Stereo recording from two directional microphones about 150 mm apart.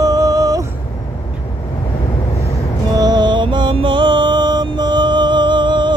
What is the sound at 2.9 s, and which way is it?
Music, 25° right (ahead or behind).